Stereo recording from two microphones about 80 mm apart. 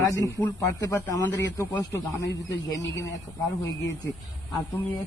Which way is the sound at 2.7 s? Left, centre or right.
Left.